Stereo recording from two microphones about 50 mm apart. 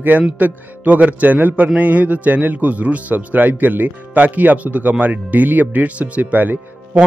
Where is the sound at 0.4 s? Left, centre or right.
Right.